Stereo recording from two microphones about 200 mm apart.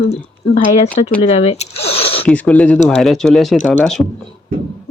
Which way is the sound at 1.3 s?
30° left (ahead or behind).